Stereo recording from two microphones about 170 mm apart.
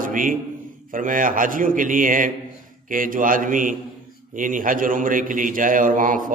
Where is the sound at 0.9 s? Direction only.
50° right (ahead or behind).